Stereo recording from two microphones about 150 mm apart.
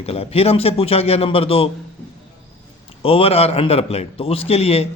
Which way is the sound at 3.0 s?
40° left (ahead or behind).